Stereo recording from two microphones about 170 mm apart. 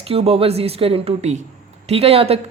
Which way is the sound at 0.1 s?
35° right (ahead or behind).